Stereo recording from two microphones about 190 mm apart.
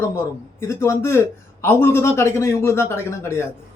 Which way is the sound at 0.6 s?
15° left (ahead or behind).